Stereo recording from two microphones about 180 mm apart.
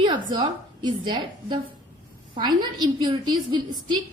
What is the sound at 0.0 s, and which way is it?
A woman's voice, 25° right (ahead or behind).